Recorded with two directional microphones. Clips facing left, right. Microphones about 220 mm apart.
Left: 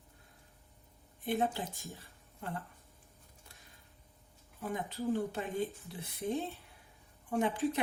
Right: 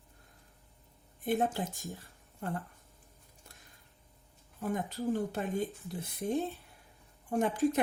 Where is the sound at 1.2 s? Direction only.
45° right (ahead or behind).